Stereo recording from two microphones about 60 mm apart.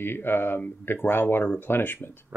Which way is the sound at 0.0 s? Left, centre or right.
Left.